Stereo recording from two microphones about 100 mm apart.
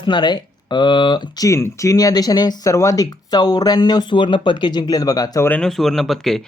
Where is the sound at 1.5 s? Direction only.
30° left (ahead or behind).